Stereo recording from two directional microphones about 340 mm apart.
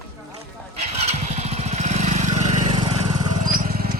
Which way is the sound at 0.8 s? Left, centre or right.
Centre.